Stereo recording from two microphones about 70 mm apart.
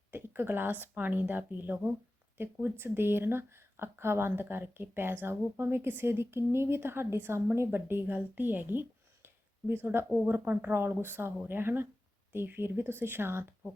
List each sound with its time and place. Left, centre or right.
0.1 s speech: right